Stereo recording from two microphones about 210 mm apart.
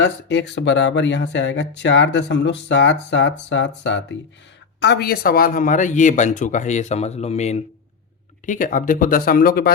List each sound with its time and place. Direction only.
0.0 s speech: 55° left (ahead or behind)